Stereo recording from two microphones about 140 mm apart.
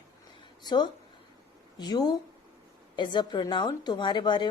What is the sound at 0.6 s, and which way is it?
A woman's voice, 30° left (ahead or behind).